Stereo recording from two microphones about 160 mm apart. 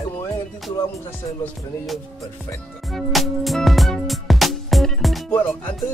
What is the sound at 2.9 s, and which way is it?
Music, centre (ahead or behind).